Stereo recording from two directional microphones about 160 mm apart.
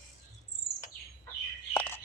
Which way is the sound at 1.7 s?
15° left (ahead or behind).